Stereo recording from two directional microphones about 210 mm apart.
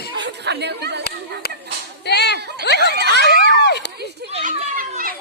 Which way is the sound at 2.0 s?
55° left (ahead or behind).